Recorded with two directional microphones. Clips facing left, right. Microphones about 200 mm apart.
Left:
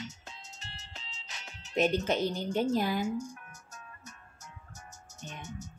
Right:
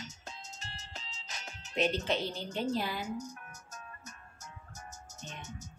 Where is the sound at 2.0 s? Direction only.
45° left (ahead or behind).